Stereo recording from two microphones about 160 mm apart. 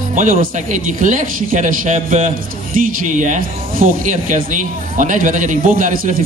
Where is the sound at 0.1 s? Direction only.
55° right (ahead or behind).